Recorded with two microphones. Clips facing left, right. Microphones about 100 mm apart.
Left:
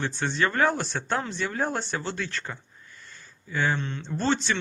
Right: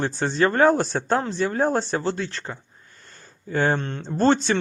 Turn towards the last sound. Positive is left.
turn(degrees=-45)  # may be behind; listen again after turning